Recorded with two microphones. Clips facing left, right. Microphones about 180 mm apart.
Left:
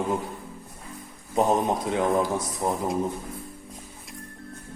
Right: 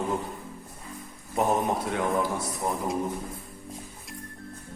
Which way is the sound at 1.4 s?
20° left (ahead or behind).